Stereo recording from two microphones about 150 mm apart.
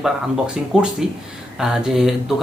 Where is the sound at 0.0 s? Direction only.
5° right (ahead or behind).